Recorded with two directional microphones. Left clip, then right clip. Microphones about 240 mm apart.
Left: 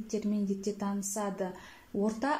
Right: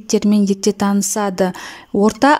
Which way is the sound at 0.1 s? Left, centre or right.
Right.